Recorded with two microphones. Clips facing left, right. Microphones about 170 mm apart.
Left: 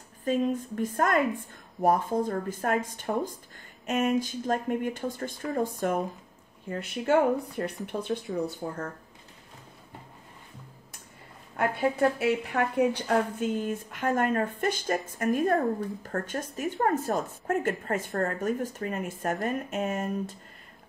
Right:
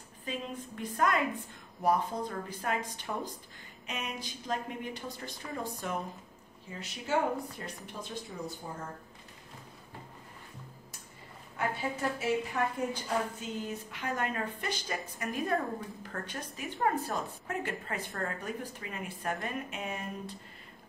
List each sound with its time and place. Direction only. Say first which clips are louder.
0.2 s a woman's voice: left 12 dB; 45° left (ahead or behind); by 8.8 s 65° left (ahead or behind)
11.5 s a woman's voice: left 7 dB; 60° left (ahead or behind)